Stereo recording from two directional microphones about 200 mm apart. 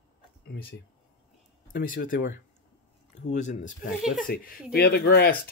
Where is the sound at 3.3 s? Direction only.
40° left (ahead or behind).